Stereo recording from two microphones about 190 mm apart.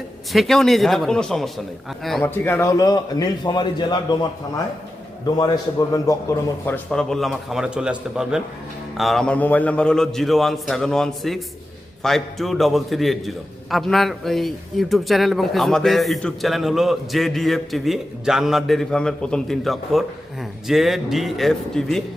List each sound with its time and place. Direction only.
0.3 s a man's voice: centre (ahead or behind); by 4.6 s 20° left (ahead or behind)
6.7 s a man's voice: 5° left (ahead or behind)